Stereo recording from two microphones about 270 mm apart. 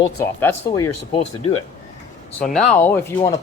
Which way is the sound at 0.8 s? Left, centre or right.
Left.